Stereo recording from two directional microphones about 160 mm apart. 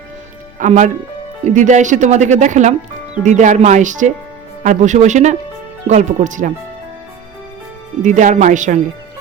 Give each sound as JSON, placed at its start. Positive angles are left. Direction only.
{"t": 0.6, "sound": "speech", "side_deg": -50}
{"t": 8.0, "sound": "speech", "side_deg": -50}